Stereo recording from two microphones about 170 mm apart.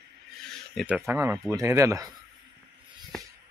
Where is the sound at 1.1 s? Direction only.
10° right (ahead or behind).